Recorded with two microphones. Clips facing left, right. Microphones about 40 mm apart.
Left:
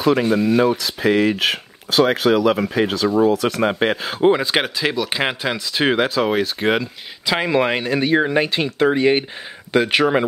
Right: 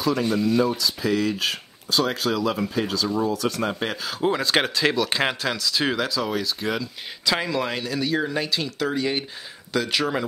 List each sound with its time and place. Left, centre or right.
0.0 s speech: left
4.4 s speech: centre; by 6.9 s left
7.2 s speech: left